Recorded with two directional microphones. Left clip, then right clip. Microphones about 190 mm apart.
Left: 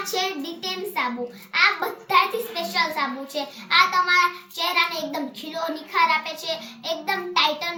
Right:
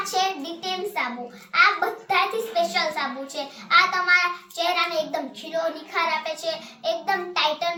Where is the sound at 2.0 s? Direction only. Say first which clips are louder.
Left 5 dB; 10° right (ahead or behind).